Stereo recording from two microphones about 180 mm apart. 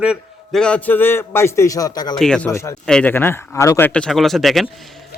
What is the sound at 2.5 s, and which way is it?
A man's voice, 15° left (ahead or behind).